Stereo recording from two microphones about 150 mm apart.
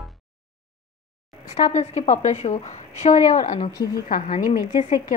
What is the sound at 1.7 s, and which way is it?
A woman's voice, 45° left (ahead or behind).